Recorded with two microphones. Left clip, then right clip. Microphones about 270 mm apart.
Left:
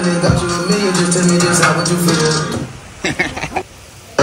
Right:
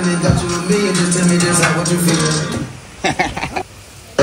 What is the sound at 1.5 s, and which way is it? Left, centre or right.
Music, centre.